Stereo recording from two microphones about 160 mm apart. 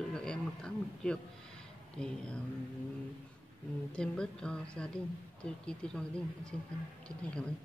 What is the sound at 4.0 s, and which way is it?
A woman's voice, 5° left (ahead or behind).